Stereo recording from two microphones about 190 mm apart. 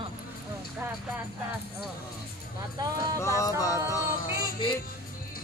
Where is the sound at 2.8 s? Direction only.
20° right (ahead or behind).